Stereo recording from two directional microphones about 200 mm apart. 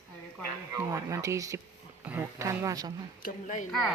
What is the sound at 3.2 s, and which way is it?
Speech, 40° left (ahead or behind).